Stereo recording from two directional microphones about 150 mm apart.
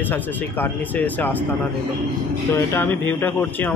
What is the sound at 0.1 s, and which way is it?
Speech, 10° left (ahead or behind).